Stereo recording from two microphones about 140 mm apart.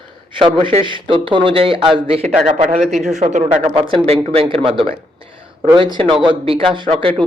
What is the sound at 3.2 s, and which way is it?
Speech, 55° right (ahead or behind).